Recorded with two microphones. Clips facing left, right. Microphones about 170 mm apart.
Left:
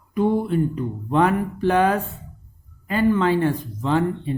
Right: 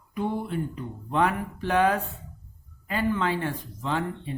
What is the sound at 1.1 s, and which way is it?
Speech, 35° left (ahead or behind).